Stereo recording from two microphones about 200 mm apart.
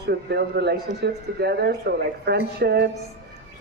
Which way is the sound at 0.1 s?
55° right (ahead or behind).